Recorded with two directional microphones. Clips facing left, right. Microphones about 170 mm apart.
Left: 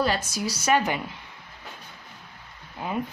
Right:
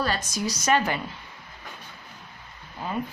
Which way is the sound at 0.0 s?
10° left (ahead or behind).